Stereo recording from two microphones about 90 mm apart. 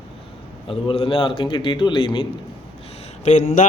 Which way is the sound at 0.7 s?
90° left.